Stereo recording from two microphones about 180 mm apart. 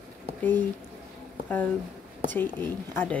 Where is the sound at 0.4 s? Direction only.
10° left (ahead or behind).